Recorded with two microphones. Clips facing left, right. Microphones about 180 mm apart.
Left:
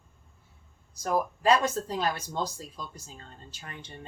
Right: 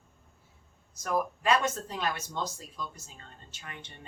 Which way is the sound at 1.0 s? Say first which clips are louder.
Left 2 dB; 35° left (ahead or behind).